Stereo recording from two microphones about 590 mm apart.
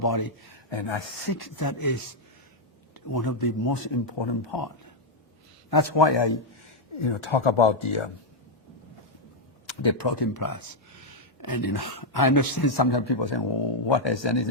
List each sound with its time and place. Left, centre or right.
0.0 s speech: left
5.7 s speech: left
9.6 s speech: left